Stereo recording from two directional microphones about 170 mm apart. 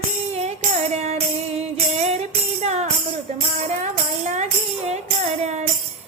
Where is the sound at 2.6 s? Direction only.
40° right (ahead or behind).